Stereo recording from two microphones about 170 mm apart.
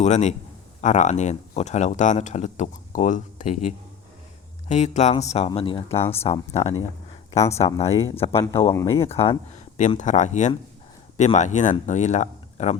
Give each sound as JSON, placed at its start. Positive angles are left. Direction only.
{"t": 0.0, "sound": "speech", "side_deg": 45}
{"t": 10.0, "sound": "speech", "side_deg": 45}